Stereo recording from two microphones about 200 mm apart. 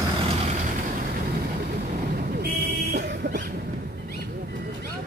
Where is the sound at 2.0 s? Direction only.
45° right (ahead or behind).